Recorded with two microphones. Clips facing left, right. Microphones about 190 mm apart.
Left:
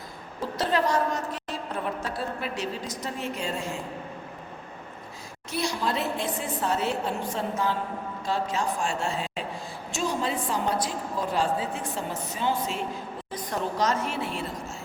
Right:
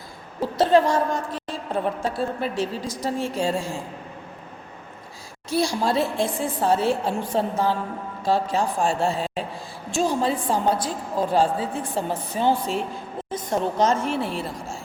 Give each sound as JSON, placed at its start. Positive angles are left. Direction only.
{"t": 0.6, "sound": "a woman's voice", "side_deg": -25}
{"t": 5.5, "sound": "a woman's voice", "side_deg": -30}